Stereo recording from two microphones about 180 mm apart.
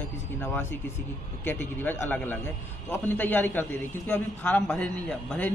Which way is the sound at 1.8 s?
10° left (ahead or behind).